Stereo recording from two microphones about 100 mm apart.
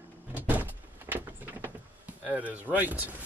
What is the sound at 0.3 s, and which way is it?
Vehicle, 20° right (ahead or behind).